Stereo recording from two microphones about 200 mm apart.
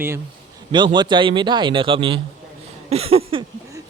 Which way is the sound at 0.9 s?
25° right (ahead or behind).